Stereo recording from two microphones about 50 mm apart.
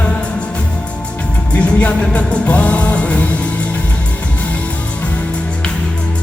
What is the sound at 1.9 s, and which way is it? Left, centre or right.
Music, left.